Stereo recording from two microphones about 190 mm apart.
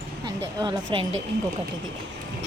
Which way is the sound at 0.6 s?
20° right (ahead or behind).